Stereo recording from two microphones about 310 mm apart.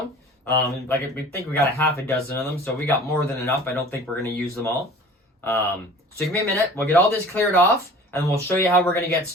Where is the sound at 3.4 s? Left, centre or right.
Centre.